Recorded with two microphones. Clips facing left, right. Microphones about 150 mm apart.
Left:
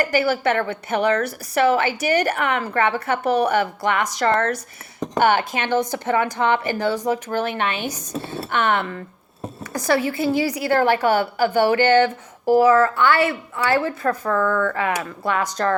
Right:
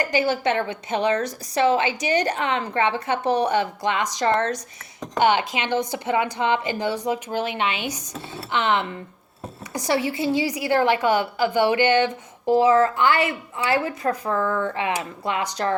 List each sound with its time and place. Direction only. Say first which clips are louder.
0.1 s a woman's voice: left 2 dB; 15° right (ahead or behind)
14.3 s speech: left 3 dB; 30° right (ahead or behind)
14.7 s speech: left 2 dB; 20° right (ahead or behind)